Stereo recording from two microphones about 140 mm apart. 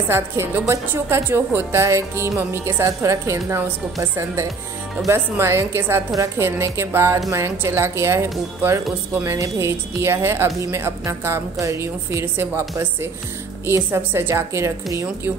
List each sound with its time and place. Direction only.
0.1 s a woman's voice: 20° right (ahead or behind)